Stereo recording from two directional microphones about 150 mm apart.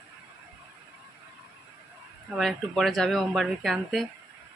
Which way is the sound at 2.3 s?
Centre (ahead or behind).